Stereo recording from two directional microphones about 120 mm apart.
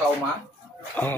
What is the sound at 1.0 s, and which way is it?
Speech, 15° left (ahead or behind).